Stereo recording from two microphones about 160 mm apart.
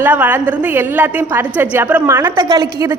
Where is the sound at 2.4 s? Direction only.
25° right (ahead or behind).